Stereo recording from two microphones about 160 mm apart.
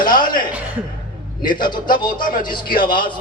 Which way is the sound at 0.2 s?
30° left (ahead or behind).